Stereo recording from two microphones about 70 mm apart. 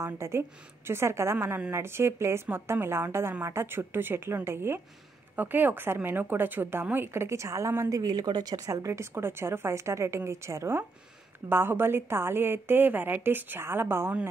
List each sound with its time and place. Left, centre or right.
0.0 s a woman's voice: right
5.3 s a woman's voice: right
8.0 s speech: right
8.7 s a woman's voice: right
11.4 s a woman's voice: right